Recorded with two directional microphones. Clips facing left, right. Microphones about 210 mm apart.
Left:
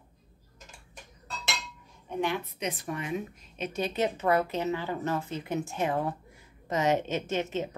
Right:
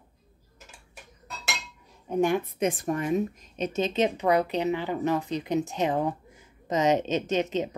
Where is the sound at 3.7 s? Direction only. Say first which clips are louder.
Right 4 dB; 20° right (ahead or behind).